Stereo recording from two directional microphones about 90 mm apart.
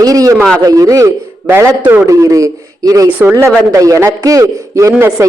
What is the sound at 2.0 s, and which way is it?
A man's voice, 40° right (ahead or behind).